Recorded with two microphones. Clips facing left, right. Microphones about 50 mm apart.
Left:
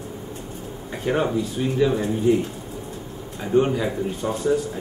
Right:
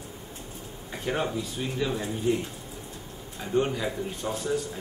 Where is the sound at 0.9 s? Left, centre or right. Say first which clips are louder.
Left 7 dB; centre.